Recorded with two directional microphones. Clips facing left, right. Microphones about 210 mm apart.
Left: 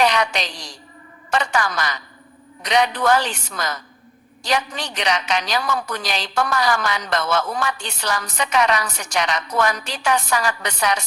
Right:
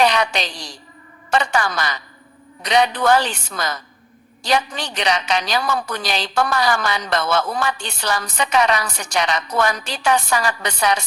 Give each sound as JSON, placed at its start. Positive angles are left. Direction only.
{"t": 0.0, "sound": "a woman's voice", "side_deg": -30}